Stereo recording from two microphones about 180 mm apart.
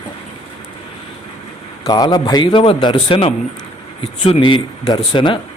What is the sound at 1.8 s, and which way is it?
A man's voice, 20° left (ahead or behind).